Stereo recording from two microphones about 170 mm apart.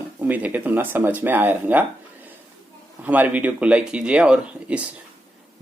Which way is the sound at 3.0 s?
10° right (ahead or behind).